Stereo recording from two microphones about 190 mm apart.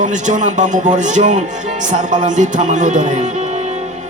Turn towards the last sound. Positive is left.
turn(degrees=-40)  # may be behind; listen again after turning